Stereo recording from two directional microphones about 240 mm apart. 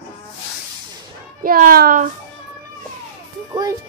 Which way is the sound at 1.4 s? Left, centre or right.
Right.